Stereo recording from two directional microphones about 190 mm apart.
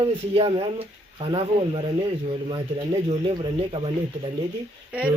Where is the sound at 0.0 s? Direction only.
30° right (ahead or behind).